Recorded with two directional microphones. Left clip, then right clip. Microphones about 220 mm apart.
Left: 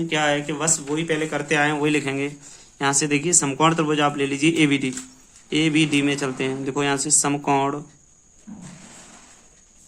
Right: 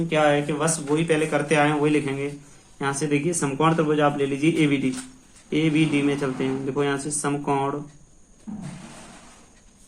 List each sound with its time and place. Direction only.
0.1 s speech: 40° left (ahead or behind)